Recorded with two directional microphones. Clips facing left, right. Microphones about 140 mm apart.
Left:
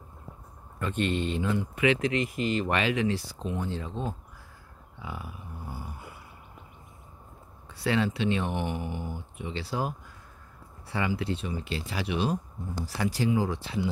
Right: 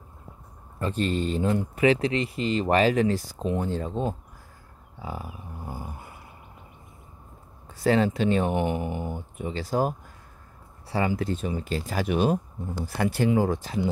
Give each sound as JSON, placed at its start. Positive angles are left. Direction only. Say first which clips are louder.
{"t": 0.7, "sound": "speech", "louder": "right 2 dB", "side_deg": -35}
{"t": 4.9, "sound": "dog", "louder": "right 4 dB", "side_deg": -40}
{"t": 7.6, "sound": "speech", "louder": "right 5 dB", "side_deg": -40}